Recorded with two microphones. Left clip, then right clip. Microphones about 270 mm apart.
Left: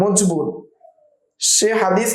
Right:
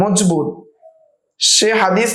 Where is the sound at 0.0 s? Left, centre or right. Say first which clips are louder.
Right 2 dB; right.